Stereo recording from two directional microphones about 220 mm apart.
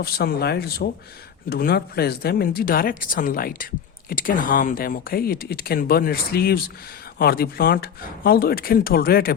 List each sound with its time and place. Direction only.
0.0 s speech: 45° left (ahead or behind)